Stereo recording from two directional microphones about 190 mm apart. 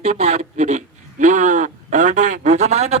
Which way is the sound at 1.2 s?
40° right (ahead or behind).